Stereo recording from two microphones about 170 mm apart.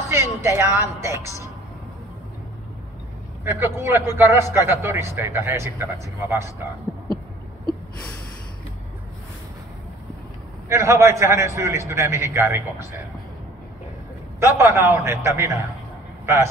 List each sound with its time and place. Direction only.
0.1 s speech: 15° right (ahead or behind)
3.4 s a man's voice: 15° right (ahead or behind)
10.7 s a man's voice: 15° right (ahead or behind)
14.4 s a man's voice: 15° right (ahead or behind)